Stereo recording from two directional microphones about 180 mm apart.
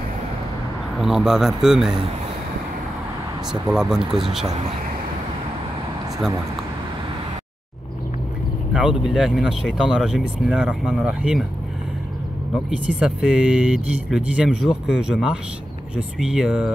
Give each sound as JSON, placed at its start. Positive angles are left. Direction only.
{"t": 0.9, "sound": "speech", "side_deg": 0}
{"t": 3.6, "sound": "speech", "side_deg": -5}
{"t": 4.0, "sound": "speech", "side_deg": -30}
{"t": 8.7, "sound": "speech", "side_deg": -5}
{"t": 12.6, "sound": "speech", "side_deg": -5}